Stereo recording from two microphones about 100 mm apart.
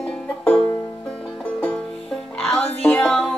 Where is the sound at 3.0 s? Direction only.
10° left (ahead or behind).